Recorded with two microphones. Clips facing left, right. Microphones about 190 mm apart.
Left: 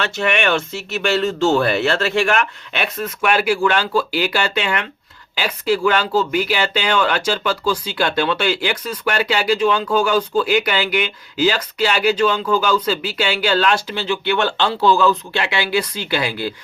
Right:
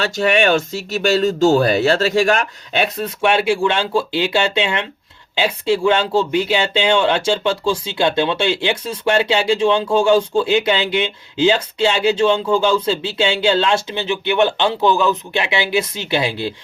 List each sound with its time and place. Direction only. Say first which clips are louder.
0.0 s speech: right 4 dB; 35° right (ahead or behind)